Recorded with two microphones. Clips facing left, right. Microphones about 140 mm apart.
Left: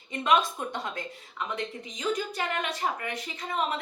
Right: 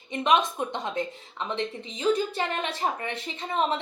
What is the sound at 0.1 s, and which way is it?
Speech, 20° right (ahead or behind).